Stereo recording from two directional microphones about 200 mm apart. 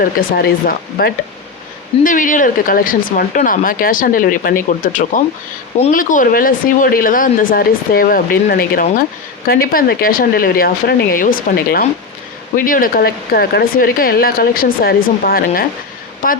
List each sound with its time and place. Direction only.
0.0 s speech: 45° left (ahead or behind)